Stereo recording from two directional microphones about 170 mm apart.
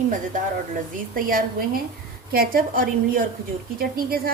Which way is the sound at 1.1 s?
55° right (ahead or behind).